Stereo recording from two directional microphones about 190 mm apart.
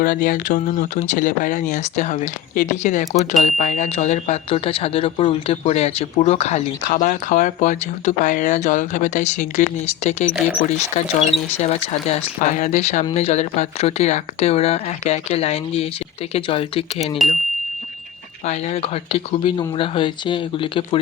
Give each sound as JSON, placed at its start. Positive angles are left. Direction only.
{"t": 0.0, "sound": "speech", "side_deg": 45}
{"t": 18.4, "sound": "speech", "side_deg": 35}